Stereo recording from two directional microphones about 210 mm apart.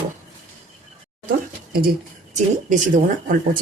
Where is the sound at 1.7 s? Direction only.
45° right (ahead or behind).